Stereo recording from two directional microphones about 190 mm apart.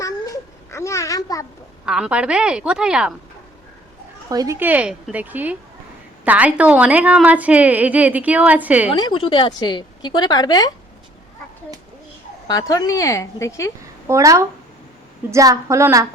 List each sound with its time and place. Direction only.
0.7 s a sound: 15° left (ahead or behind)
1.8 s a woman's voice: 5° right (ahead or behind)
4.3 s a woman's voice: 20° right (ahead or behind)
8.9 s a woman's voice: 25° left (ahead or behind)
12.5 s a woman's voice: 20° left (ahead or behind)
14.1 s a woman's voice: 15° right (ahead or behind)